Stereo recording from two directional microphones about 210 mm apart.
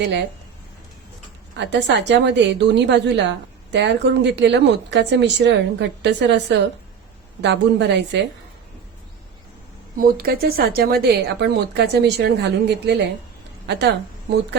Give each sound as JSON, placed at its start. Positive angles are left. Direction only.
{"t": 1.5, "sound": "a woman's voice", "side_deg": -55}
{"t": 7.4, "sound": "a woman's voice", "side_deg": -55}
{"t": 10.0, "sound": "a woman's voice", "side_deg": -45}